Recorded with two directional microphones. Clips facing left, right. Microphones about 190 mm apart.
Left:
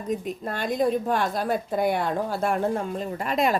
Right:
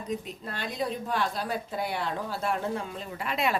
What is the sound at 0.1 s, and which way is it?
A woman's voice, 50° left (ahead or behind).